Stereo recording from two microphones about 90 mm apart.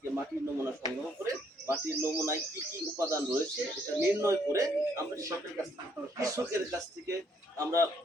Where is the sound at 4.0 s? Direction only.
30° right (ahead or behind).